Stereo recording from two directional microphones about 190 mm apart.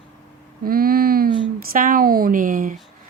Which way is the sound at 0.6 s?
50° right (ahead or behind).